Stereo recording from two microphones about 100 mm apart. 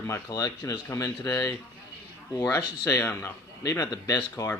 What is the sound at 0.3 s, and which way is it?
A man's voice, 35° left (ahead or behind).